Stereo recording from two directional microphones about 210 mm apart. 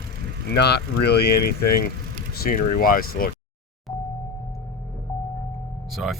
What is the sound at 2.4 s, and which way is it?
Speech, 40° left (ahead or behind).